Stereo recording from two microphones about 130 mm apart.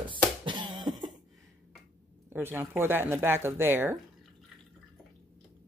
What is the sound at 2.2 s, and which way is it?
Speech, 20° right (ahead or behind).